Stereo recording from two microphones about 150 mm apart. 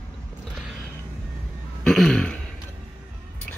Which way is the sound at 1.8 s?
5° left (ahead or behind).